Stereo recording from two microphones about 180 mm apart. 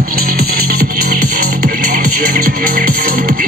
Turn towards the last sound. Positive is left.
turn(degrees=-55)  # may be behind; listen again after turning